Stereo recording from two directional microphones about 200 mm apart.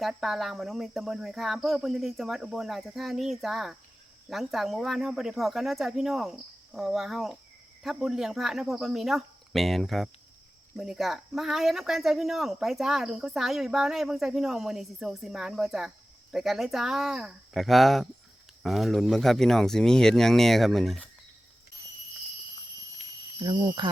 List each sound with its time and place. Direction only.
0.0 s speech: centre (ahead or behind)
23.4 s speech: 20° right (ahead or behind)